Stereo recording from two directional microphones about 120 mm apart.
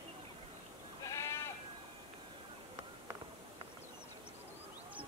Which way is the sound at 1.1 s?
25° left (ahead or behind).